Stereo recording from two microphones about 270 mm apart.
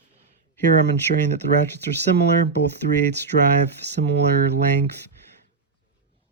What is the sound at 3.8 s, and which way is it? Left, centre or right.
Speech, right.